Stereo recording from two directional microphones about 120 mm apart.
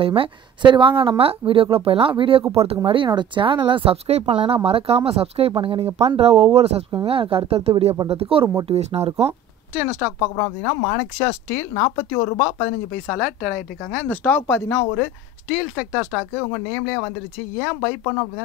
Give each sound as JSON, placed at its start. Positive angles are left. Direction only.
{"t": 0.0, "sound": "speech", "side_deg": -50}
{"t": 9.8, "sound": "speech", "side_deg": -15}
{"t": 10.1, "sound": "speech", "side_deg": 10}
{"t": 11.1, "sound": "speech", "side_deg": 25}
{"t": 12.6, "sound": "speech", "side_deg": 10}
{"t": 13.2, "sound": "speech", "side_deg": -5}
{"t": 14.0, "sound": "speech", "side_deg": 15}
{"t": 15.4, "sound": "speech", "side_deg": -5}
{"t": 16.3, "sound": "speech", "side_deg": 5}